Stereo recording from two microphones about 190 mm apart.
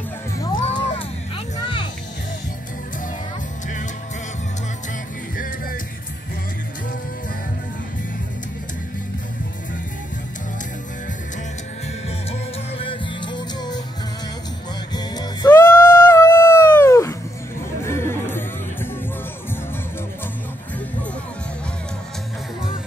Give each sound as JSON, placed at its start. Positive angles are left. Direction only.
{"t": 0.7, "sound": "a sound", "side_deg": 30}
{"t": 12.3, "sound": "music", "side_deg": 30}
{"t": 15.0, "sound": "music", "side_deg": 20}
{"t": 15.5, "sound": "dog", "side_deg": 10}
{"t": 17.8, "sound": "music", "side_deg": 15}